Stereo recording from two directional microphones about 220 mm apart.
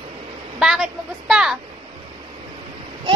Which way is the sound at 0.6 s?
Centre (ahead or behind).